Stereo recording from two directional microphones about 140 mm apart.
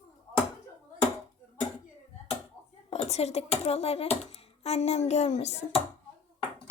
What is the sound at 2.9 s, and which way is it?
Speech, 50° left (ahead or behind).